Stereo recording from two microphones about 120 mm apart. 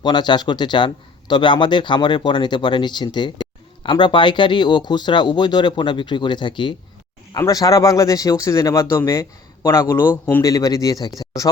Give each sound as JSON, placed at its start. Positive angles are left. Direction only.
{"t": 0.0, "sound": "speech", "side_deg": 40}
{"t": 7.3, "sound": "speech", "side_deg": 30}
{"t": 10.4, "sound": "speech", "side_deg": 30}